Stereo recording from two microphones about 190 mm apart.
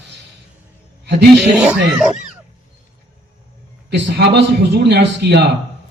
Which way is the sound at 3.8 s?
65° right (ahead or behind).